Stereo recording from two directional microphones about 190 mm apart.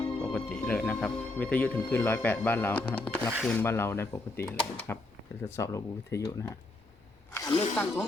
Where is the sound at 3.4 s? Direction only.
10° left (ahead or behind).